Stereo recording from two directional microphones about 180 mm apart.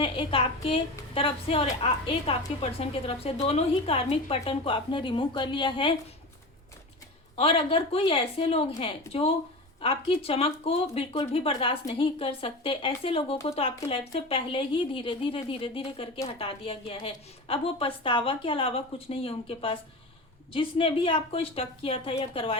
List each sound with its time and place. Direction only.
0.0 s a woman's voice: 30° left (ahead or behind)
7.3 s a woman's voice: 30° left (ahead or behind)